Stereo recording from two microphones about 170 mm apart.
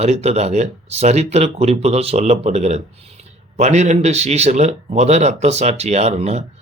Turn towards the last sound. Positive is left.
turn(degrees=-40)  # may be behind; listen again after turning